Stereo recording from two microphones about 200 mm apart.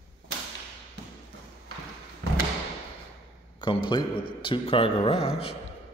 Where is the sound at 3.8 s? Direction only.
25° left (ahead or behind).